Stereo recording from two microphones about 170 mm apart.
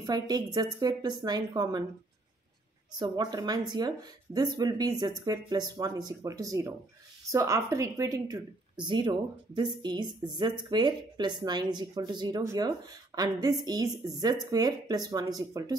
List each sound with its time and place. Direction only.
0.0 s a woman's voice: 25° right (ahead or behind)
2.9 s a woman's voice: 25° right (ahead or behind)